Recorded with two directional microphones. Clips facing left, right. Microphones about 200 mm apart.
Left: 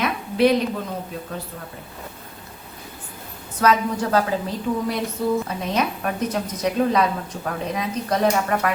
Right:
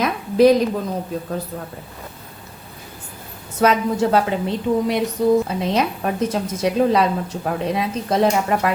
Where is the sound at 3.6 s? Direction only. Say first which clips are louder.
Right 3 dB; 25° right (ahead or behind).